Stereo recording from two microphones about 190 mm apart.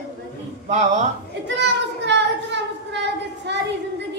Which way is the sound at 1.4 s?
65° right (ahead or behind).